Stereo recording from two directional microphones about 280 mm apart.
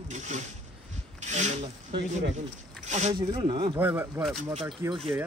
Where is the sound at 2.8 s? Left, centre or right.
Right.